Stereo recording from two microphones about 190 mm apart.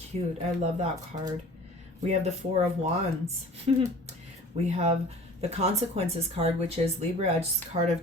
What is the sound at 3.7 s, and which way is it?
Speech, 35° right (ahead or behind).